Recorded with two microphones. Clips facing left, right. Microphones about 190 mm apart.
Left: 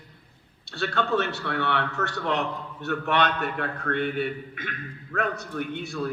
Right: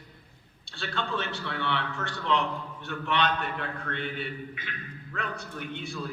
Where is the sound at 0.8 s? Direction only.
45° left (ahead or behind).